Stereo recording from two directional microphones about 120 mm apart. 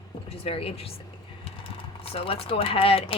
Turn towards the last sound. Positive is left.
turn(degrees=50)  # may be behind; listen again after turning